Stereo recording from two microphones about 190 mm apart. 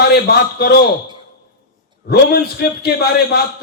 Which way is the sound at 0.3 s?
55° left (ahead or behind).